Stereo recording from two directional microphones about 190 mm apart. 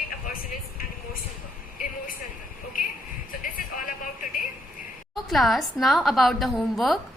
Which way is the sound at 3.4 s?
45° left (ahead or behind).